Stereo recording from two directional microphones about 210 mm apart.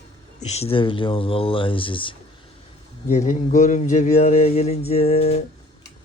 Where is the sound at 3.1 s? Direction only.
35° left (ahead or behind).